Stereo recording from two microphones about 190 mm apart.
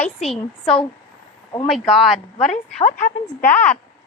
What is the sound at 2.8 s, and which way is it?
Speech, 35° left (ahead or behind).